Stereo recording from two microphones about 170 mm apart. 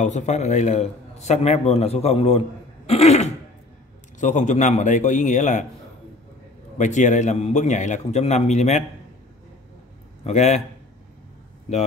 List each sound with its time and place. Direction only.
0.0 s a man's voice: 45° left (ahead or behind)
6.8 s a man's voice: 45° left (ahead or behind)
10.2 s a man's voice: 40° left (ahead or behind)